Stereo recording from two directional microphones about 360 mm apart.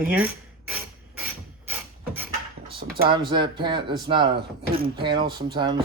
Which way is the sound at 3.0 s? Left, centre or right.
Centre.